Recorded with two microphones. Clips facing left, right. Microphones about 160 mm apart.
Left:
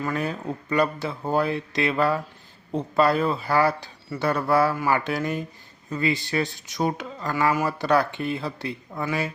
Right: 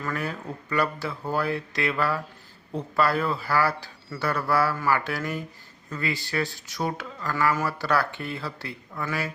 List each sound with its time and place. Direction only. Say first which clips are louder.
0.0 s speech: left 4 dB; 20° left (ahead or behind)